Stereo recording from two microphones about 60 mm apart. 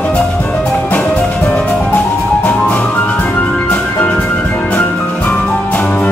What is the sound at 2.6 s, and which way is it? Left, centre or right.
Music, left.